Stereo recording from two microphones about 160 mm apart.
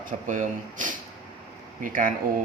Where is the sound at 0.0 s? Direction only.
55° right (ahead or behind).